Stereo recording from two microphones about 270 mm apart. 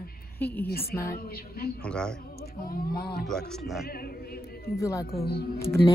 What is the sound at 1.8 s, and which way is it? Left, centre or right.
Speech, centre.